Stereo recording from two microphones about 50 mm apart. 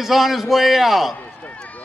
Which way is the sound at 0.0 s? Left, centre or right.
Centre.